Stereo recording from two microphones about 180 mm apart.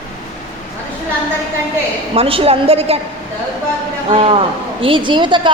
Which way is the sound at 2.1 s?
30° right (ahead or behind).